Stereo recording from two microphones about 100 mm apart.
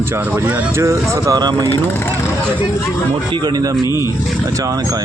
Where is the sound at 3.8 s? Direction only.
40° left (ahead or behind).